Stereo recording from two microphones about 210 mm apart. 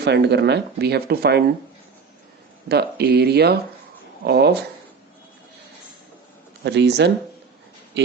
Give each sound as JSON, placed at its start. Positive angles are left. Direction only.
{"t": 0.0, "sound": "speech", "side_deg": -55}
{"t": 2.6, "sound": "speech", "side_deg": -50}
{"t": 6.7, "sound": "speech", "side_deg": -55}